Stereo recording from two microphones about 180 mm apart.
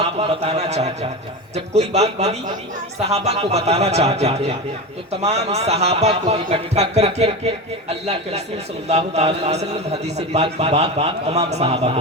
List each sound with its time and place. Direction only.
0.0 s a man's voice: 35° right (ahead or behind)
8.9 s a man's voice: 35° right (ahead or behind)